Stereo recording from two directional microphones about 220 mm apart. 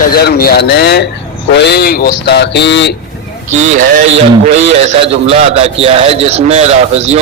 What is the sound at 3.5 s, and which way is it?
A man's voice, 35° right (ahead or behind).